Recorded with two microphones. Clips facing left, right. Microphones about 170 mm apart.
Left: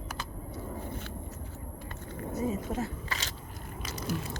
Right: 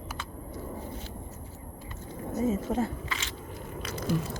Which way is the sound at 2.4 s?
30° right (ahead or behind).